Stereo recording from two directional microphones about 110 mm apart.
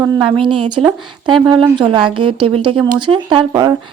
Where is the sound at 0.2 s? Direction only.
50° right (ahead or behind).